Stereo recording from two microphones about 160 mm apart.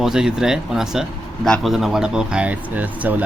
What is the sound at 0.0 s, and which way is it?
Speech, 5° right (ahead or behind).